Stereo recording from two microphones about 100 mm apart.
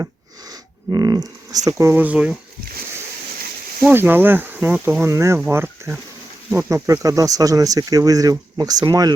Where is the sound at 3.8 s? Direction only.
20° right (ahead or behind).